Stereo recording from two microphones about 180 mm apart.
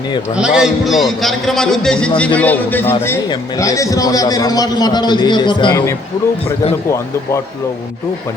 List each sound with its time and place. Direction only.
0.3 s a man's voice: 5° right (ahead or behind); by 5.7 s 25° left (ahead or behind)